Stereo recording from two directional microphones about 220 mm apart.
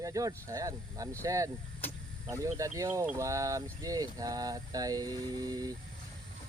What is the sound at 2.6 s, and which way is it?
Speech, 15° right (ahead or behind).